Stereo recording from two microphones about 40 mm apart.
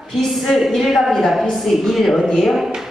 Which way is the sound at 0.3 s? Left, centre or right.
Centre.